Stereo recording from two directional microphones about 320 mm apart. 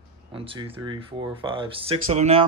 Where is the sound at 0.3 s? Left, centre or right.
Centre.